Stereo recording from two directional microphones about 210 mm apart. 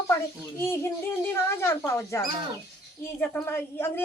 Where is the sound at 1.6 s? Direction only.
10° left (ahead or behind).